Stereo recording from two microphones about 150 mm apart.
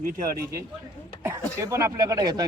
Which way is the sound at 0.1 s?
90° right.